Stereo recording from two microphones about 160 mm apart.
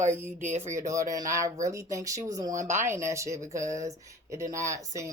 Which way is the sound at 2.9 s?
20° right (ahead or behind).